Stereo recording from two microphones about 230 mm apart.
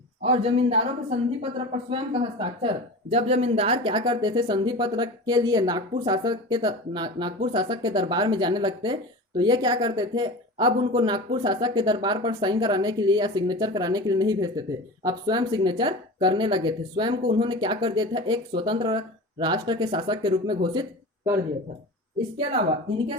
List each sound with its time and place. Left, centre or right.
0.3 s speech: right